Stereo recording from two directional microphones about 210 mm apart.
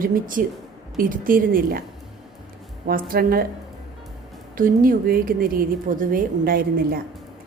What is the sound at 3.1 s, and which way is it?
Speech, 45° right (ahead or behind).